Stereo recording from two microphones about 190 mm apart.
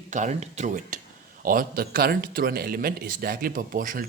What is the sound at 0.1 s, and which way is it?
Speech, 40° right (ahead or behind).